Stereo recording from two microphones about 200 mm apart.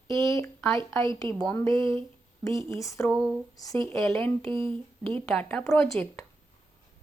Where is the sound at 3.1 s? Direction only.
Centre (ahead or behind).